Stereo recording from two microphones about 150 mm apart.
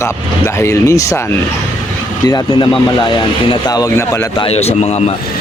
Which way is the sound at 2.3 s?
30° left (ahead or behind).